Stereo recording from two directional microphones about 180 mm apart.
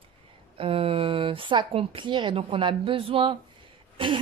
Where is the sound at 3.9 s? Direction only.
30° right (ahead or behind).